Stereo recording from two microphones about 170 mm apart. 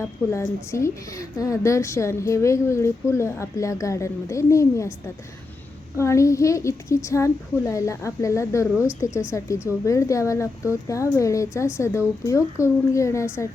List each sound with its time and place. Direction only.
0.0 s a woman's voice: 15° left (ahead or behind)